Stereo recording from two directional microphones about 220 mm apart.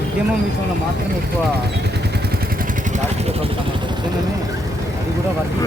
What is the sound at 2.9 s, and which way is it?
Speech, 30° right (ahead or behind).